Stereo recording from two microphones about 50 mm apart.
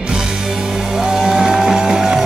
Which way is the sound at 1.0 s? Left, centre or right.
Centre.